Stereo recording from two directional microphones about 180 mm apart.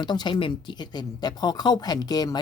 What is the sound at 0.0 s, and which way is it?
Speech, 25° left (ahead or behind).